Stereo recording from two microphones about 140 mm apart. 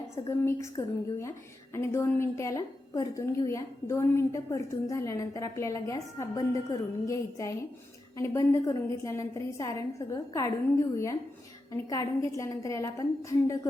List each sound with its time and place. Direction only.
0.3 s a woman's voice: 20° left (ahead or behind)